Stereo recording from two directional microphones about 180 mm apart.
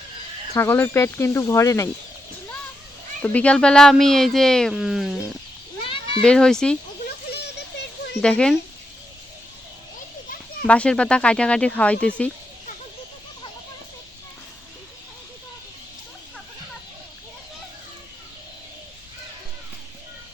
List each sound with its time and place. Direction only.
0.5 s speech: 15° left (ahead or behind)
3.2 s speech: 10° left (ahead or behind)
5.8 s cat: 30° left (ahead or behind)
6.2 s speech: 5° left (ahead or behind)
8.2 s speech: 5° left (ahead or behind)
10.7 s speech: 5° left (ahead or behind)